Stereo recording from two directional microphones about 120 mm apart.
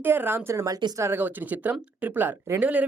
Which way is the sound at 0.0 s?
15° right (ahead or behind).